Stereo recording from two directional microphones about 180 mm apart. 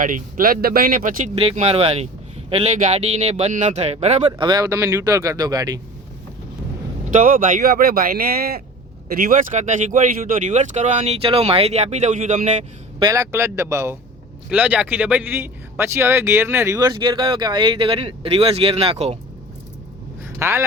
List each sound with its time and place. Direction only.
0.0 s speech: 50° right (ahead or behind)
1.4 s speech: 35° right (ahead or behind)
7.1 s speech: 50° right (ahead or behind)
13.0 s speech: 15° right (ahead or behind); by 19.1 s 35° right (ahead or behind)
20.4 s speech: 15° right (ahead or behind)